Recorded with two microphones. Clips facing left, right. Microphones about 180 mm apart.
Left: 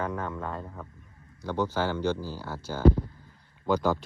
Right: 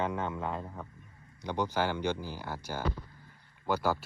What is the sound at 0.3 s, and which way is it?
Speech, 5° right (ahead or behind).